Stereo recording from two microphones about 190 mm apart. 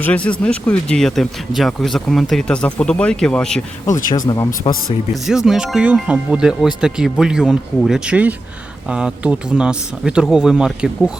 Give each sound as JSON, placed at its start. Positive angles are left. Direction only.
{"t": 0.0, "sound": "speech", "side_deg": 5}
{"t": 3.8, "sound": "speech", "side_deg": 15}
{"t": 5.2, "sound": "speech", "side_deg": 0}